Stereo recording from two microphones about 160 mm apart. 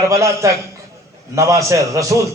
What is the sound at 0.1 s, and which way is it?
A man's voice, 20° right (ahead or behind).